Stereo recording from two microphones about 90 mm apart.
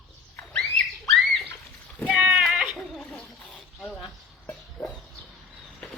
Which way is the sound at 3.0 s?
15° left (ahead or behind).